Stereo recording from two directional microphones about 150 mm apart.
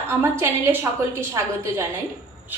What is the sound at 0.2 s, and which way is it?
Speech, 15° right (ahead or behind).